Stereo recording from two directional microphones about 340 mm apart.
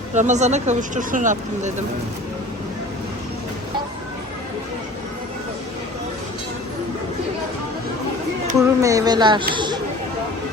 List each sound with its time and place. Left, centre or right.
0.1 s speech: right
8.5 s speech: centre
9.6 s chatter: centre